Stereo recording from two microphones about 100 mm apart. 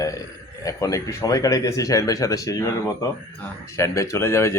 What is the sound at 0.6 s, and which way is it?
A man's voice, 35° left (ahead or behind).